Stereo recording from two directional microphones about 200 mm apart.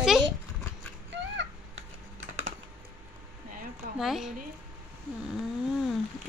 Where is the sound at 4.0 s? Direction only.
Centre (ahead or behind).